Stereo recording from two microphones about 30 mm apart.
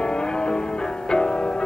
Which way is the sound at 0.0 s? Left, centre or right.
Left.